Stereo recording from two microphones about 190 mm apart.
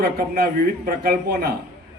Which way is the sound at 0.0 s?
55° right (ahead or behind).